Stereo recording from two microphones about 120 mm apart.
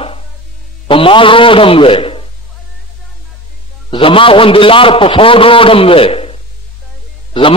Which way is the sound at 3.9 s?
45° left (ahead or behind).